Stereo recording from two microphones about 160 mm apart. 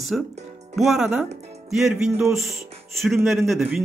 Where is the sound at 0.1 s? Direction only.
Centre (ahead or behind).